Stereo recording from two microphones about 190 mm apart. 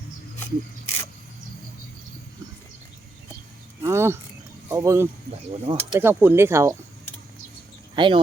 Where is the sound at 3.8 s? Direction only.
15° right (ahead or behind).